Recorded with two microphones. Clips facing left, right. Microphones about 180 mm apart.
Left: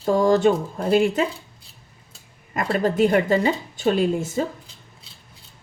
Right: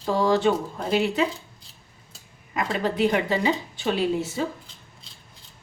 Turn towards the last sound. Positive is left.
turn(degrees=45)  # may be behind; listen again after turning